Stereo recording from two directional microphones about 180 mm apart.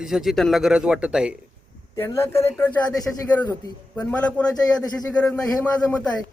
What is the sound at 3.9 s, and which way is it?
Speech, 10° left (ahead or behind).